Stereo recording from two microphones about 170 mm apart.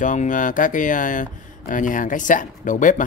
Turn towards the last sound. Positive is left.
turn(degrees=50)  # may be behind; listen again after turning